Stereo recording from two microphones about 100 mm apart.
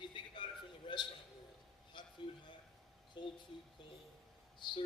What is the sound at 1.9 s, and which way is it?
Music, 55° left (ahead or behind).